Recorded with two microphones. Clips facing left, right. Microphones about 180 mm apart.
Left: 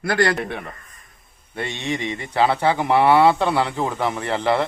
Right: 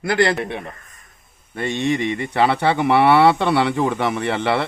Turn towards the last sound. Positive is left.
turn(degrees=-70)  # may be behind; listen again after turning